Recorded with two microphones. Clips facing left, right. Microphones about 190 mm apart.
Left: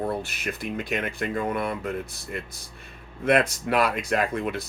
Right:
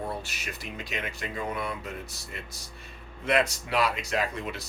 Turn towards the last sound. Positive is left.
turn(degrees=55)  # may be behind; listen again after turning